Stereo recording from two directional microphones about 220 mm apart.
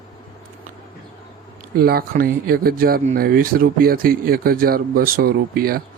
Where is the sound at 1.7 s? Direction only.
45° right (ahead or behind).